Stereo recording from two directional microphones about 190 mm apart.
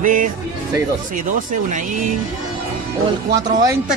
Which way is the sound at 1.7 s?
40° right (ahead or behind).